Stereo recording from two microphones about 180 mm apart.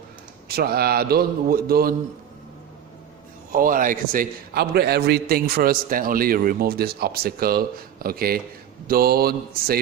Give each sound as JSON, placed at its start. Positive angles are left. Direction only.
{"t": 0.4, "sound": "a man's voice", "side_deg": -60}
{"t": 3.5, "sound": "a man's voice", "side_deg": -50}